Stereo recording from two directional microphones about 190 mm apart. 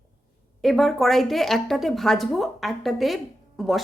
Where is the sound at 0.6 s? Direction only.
Centre (ahead or behind).